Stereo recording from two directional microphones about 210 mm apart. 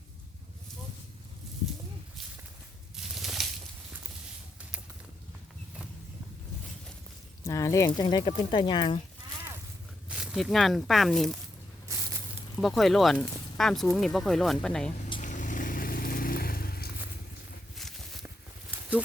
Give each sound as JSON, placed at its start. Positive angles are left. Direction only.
{"t": 2.9, "sound": "a sound", "side_deg": 0}
{"t": 7.4, "sound": "speech", "side_deg": 15}
{"t": 10.1, "sound": "speech", "side_deg": -5}
{"t": 12.5, "sound": "speech", "side_deg": 0}
{"t": 14.9, "sound": "vehicle", "side_deg": 35}
{"t": 17.7, "sound": "a sound", "side_deg": 0}